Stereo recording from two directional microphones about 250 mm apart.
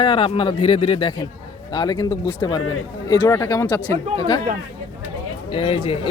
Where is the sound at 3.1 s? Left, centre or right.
Centre.